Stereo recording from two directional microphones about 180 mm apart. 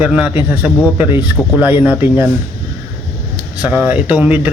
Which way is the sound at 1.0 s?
25° left (ahead or behind).